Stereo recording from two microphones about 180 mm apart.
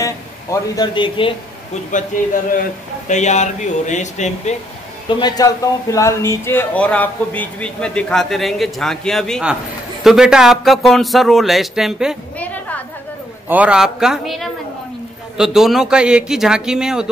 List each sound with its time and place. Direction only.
0.0 s speech: 20° left (ahead or behind)
3.1 s speech: 40° left (ahead or behind)
5.2 s speech: 20° left (ahead or behind); by 12.2 s 5° right (ahead or behind)
12.4 s a sound: 10° left (ahead or behind)
13.5 s speech: 5° right (ahead or behind)